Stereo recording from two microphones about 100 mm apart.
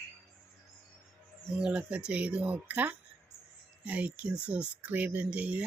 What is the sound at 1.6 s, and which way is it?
Speech, 10° right (ahead or behind).